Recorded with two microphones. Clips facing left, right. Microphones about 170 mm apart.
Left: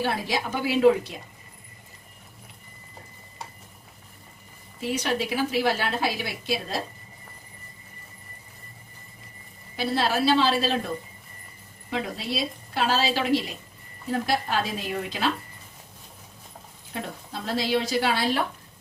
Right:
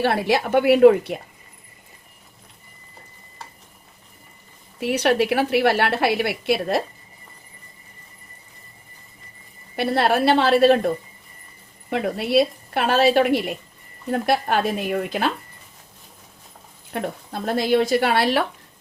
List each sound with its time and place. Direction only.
0.0 s a woman's voice: 65° right (ahead or behind)
4.8 s a woman's voice: 65° right (ahead or behind)
9.7 s a woman's voice: 60° right (ahead or behind)
16.9 s a woman's voice: 55° right (ahead or behind); by 18.4 s 70° right (ahead or behind)